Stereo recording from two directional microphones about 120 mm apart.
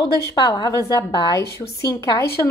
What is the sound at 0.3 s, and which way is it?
A woman's voice, 30° left (ahead or behind).